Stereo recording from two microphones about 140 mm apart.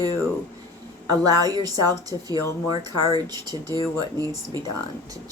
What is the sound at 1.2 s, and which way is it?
Speech, 25° right (ahead or behind).